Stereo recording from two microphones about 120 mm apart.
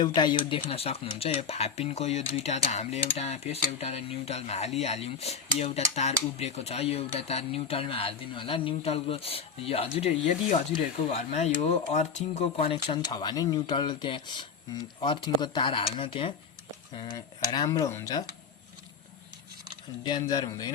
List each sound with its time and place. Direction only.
0.0 s speech: 40° left (ahead or behind)
13.1 s speech: 35° left (ahead or behind)
17.2 s speech: 35° left (ahead or behind)
17.7 s speech: 25° left (ahead or behind)
20.1 s speech: 35° left (ahead or behind)